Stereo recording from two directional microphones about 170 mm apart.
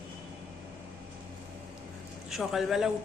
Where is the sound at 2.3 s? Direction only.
Centre (ahead or behind).